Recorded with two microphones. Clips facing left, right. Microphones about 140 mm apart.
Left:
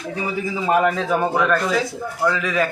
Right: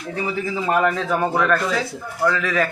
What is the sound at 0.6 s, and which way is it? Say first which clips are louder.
Speech: left 2 dB; 10° left (ahead or behind).